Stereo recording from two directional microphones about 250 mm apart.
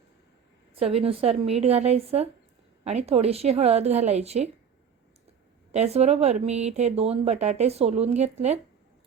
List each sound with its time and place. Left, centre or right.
0.8 s speech: right
5.7 s speech: right